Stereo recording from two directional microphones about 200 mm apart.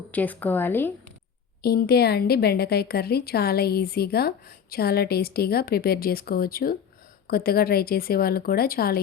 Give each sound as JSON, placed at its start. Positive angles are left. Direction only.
{"t": 0.1, "sound": "speech", "side_deg": 10}
{"t": 1.6, "sound": "a woman's voice", "side_deg": 50}